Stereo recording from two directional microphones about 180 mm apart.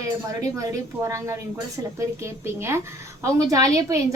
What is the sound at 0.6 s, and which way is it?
A woman's voice, 15° right (ahead or behind).